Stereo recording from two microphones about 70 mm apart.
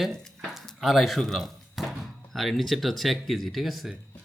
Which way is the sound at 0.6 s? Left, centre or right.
Centre.